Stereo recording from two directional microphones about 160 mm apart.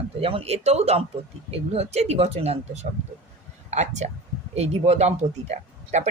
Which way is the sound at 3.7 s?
45° right (ahead or behind).